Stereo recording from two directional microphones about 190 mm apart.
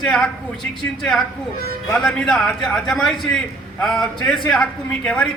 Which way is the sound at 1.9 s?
5° left (ahead or behind).